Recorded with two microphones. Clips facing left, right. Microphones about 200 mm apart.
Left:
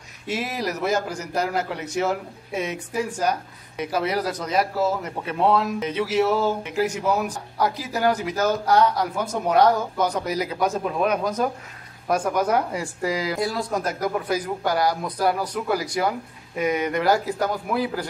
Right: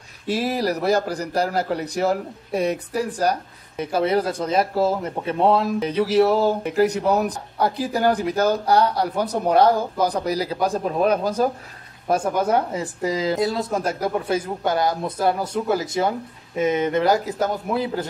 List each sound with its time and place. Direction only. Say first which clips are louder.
0.3 s a man's voice: right 5 dB; 35° right (ahead or behind)